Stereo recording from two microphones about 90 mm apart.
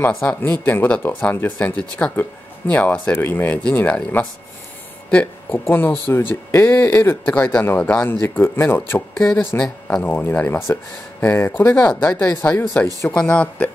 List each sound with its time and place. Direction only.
0.4 s speech: 20° left (ahead or behind)
7.2 s speech: 15° left (ahead or behind)
11.9 s speech: 10° left (ahead or behind); by 13.1 s 30° left (ahead or behind)
13.1 s speech: 15° left (ahead or behind)